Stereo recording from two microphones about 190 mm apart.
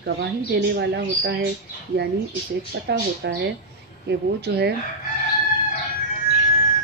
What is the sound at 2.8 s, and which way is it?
A woman's voice, 60° right (ahead or behind).